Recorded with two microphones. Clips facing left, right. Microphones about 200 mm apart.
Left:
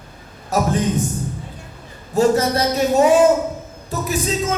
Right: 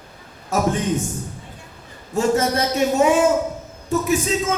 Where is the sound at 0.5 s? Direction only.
35° left (ahead or behind).